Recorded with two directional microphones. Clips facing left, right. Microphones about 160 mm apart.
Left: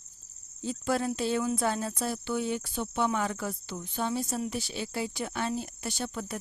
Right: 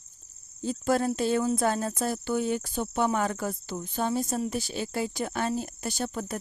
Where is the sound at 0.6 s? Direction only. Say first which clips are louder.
Right 4 dB; 45° right (ahead or behind).